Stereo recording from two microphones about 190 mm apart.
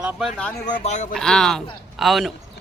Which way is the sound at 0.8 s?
40° left (ahead or behind).